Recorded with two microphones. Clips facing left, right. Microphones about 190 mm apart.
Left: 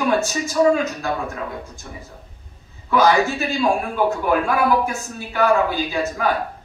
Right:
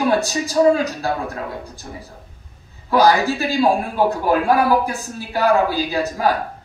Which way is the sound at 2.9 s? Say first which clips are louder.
Right 1 dB; 35° right (ahead or behind).